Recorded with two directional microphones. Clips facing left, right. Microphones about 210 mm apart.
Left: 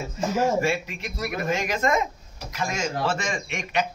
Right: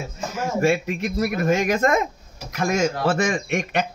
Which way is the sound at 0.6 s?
50° right (ahead or behind).